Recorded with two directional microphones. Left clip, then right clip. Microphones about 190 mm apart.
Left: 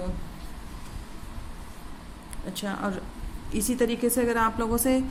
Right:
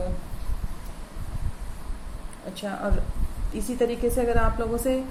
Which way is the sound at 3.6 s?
50° left (ahead or behind).